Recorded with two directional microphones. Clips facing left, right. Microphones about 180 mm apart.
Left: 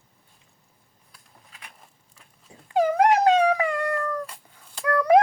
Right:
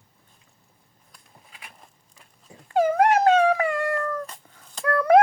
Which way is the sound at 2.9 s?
15° left (ahead or behind).